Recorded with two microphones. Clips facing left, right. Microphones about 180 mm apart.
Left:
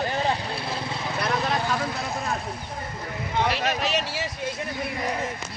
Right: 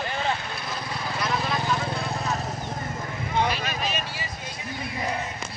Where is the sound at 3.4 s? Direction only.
70° left (ahead or behind).